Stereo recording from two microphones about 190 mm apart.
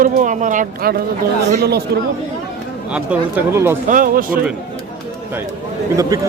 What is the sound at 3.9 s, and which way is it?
Speech, 45° right (ahead or behind).